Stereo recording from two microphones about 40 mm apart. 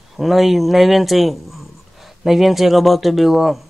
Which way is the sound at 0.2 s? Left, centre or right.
Centre.